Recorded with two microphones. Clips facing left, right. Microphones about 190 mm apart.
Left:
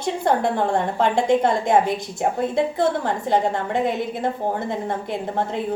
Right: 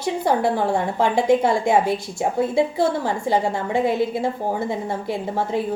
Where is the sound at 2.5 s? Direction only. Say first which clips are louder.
Right 1 dB; 10° right (ahead or behind).